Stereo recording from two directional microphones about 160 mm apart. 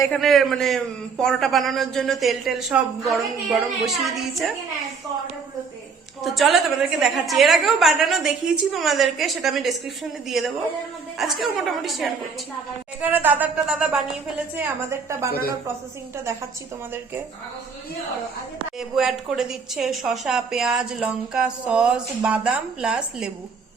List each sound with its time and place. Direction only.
0.1 s a woman's voice: centre (ahead or behind)
6.2 s a woman's voice: centre (ahead or behind)
13.0 s speech: 10° right (ahead or behind)
18.8 s a woman's voice: centre (ahead or behind)